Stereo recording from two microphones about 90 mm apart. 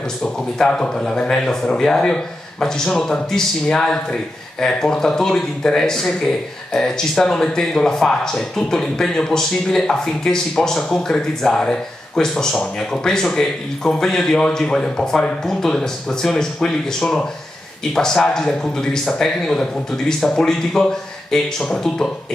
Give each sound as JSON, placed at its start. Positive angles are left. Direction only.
{"t": 0.2, "sound": "speech", "side_deg": 10}